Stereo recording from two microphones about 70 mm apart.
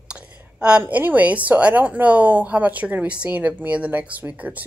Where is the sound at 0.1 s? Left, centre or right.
Centre.